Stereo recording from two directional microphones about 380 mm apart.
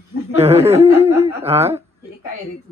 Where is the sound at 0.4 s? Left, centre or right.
Centre.